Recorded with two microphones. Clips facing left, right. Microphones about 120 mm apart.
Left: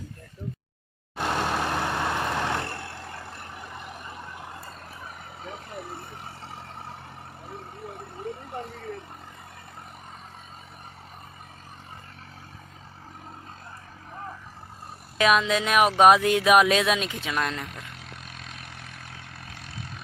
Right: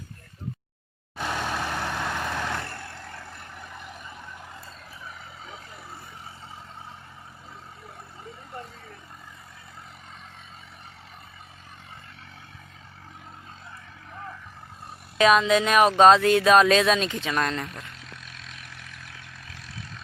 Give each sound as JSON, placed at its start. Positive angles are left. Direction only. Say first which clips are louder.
{"t": 1.1, "sound": "vehicle", "louder": "left 3 dB", "side_deg": 55}
{"t": 1.5, "sound": "vehicle", "louder": "left 3 dB", "side_deg": 10}
{"t": 3.8, "sound": "vehicle", "louder": "left 2 dB", "side_deg": 60}
{"t": 8.3, "sound": "vehicle", "louder": "left 11 dB", "side_deg": 65}
{"t": 15.2, "sound": "speech", "louder": "right 3 dB", "side_deg": 0}